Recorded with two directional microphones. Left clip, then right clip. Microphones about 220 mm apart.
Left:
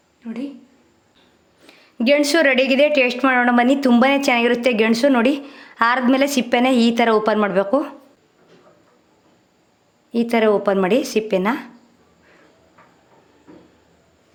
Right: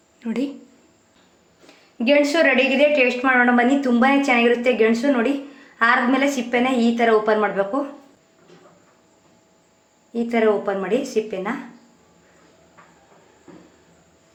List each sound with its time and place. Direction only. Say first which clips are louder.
0.2 s speech: right 5 dB; 35° right (ahead or behind)
2.0 s a woman's voice: left 1 dB; 40° left (ahead or behind)
10.1 s a woman's voice: left 2 dB; 50° left (ahead or behind)